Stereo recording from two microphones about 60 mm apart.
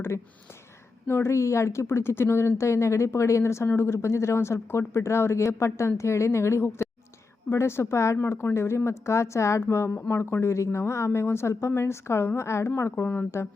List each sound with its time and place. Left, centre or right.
1.0 s a woman's voice: left